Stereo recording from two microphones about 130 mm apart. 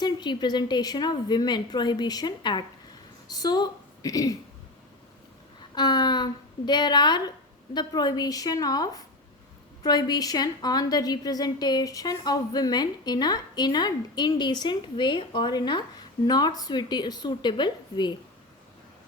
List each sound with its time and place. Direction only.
0.0 s a woman's voice: 35° left (ahead or behind)
5.7 s a woman's voice: 35° left (ahead or behind)